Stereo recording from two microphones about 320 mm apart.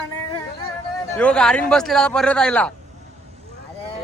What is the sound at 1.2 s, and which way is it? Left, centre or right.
A man's voice, centre.